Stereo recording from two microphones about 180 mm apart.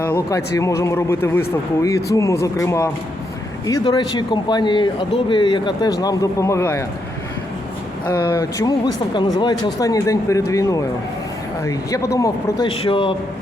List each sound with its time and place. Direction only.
0.0 s a man's voice: 15° left (ahead or behind)
8.0 s a man's voice: 15° left (ahead or behind)